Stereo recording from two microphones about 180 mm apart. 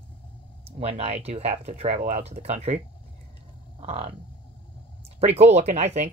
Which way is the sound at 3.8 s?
30° right (ahead or behind).